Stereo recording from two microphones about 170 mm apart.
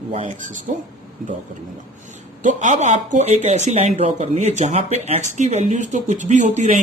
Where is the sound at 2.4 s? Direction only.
45° right (ahead or behind).